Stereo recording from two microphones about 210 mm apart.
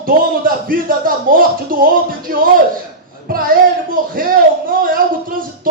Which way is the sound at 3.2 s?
45° right (ahead or behind).